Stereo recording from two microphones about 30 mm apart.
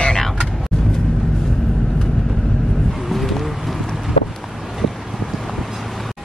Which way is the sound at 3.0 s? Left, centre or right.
Centre.